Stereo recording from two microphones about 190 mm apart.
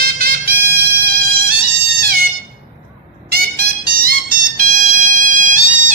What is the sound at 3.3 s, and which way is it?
Music, 55° right (ahead or behind).